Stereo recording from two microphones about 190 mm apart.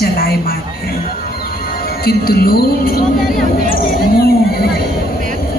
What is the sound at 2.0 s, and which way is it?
A woman's voice, 50° left (ahead or behind).